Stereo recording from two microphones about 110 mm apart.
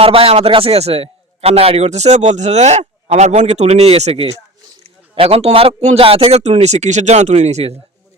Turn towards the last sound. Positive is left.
turn(degrees=-80)